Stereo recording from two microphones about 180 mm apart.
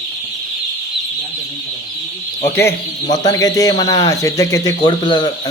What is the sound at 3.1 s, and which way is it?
Speech, 20° left (ahead or behind).